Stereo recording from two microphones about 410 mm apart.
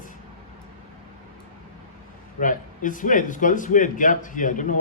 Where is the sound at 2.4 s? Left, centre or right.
Centre.